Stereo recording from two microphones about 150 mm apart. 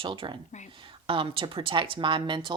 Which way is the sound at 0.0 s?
35° right (ahead or behind).